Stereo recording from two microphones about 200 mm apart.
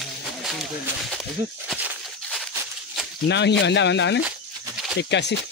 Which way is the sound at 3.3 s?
60° left (ahead or behind).